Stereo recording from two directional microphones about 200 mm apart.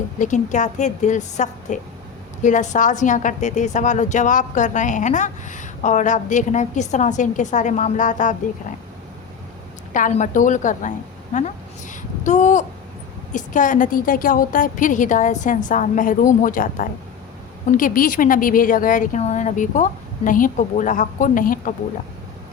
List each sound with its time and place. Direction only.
0.2 s a woman's voice: 40° left (ahead or behind)
9.9 s a woman's voice: 40° left (ahead or behind)